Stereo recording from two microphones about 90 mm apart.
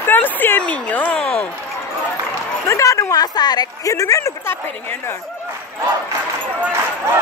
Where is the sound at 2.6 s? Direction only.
35° left (ahead or behind).